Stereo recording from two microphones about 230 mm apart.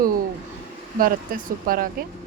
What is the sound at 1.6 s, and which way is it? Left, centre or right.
Speech, right.